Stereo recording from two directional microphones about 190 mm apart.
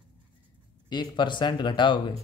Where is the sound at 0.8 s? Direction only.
25° left (ahead or behind).